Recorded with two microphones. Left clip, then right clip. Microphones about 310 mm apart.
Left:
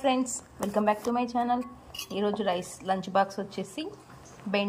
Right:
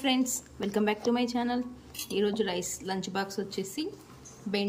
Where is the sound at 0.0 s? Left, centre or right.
Centre.